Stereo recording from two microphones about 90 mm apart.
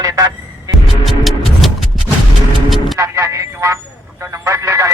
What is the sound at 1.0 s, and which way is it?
Music, centre (ahead or behind).